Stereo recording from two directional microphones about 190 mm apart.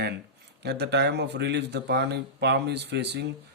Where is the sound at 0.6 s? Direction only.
60° right (ahead or behind).